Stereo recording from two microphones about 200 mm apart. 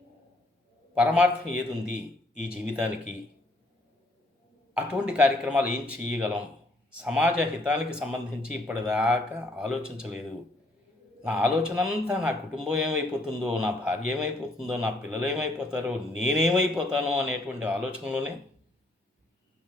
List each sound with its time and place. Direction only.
0.9 s speech: 5° right (ahead or behind)
4.7 s speech: 5° right (ahead or behind)